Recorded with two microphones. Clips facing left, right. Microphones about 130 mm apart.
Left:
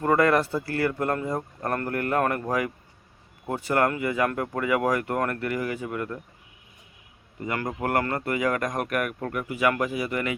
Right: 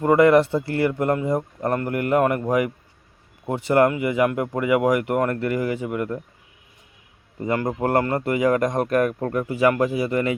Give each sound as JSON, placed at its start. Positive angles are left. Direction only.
{"t": 0.0, "sound": "speech", "side_deg": -20}
{"t": 7.3, "sound": "speech", "side_deg": -30}